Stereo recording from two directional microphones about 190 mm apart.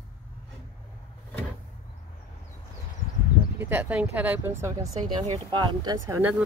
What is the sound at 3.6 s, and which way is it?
Speech, 10° right (ahead or behind).